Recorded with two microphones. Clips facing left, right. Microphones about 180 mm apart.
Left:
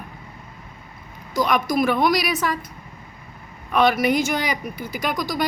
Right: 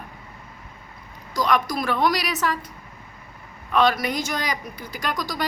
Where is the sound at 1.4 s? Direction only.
15° left (ahead or behind).